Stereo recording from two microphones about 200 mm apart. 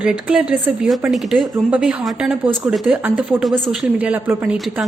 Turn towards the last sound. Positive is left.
turn(degrees=-5)  # may be behind; listen again after turning